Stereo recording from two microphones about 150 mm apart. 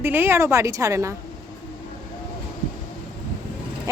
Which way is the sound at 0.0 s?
15° right (ahead or behind).